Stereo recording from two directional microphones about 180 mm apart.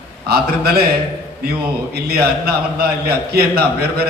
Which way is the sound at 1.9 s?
60° right (ahead or behind).